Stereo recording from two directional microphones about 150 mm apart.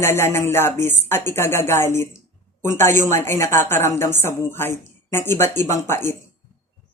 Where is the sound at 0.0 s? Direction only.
15° left (ahead or behind).